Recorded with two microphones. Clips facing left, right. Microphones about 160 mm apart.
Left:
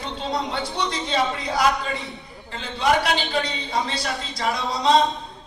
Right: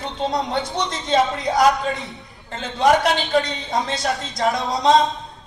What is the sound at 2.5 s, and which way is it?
Speech, 45° right (ahead or behind).